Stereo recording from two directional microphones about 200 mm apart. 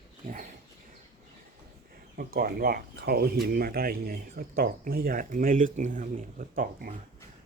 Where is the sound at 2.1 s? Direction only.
50° right (ahead or behind).